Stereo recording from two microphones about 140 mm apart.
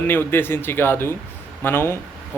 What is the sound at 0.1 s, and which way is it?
Speech, 15° left (ahead or behind).